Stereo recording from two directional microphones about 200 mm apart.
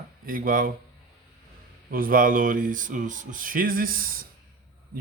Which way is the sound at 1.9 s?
45° right (ahead or behind).